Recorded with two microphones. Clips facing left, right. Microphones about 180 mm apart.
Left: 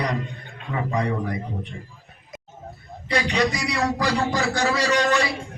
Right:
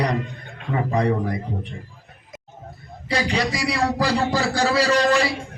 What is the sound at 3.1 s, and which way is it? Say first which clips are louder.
A man's voice: even; 35° right (ahead or behind).